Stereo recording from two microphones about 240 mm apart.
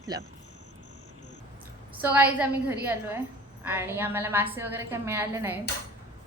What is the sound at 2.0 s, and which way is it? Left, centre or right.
A woman's voice, centre.